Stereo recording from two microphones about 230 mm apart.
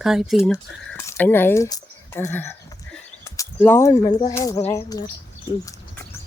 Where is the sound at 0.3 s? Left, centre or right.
Centre.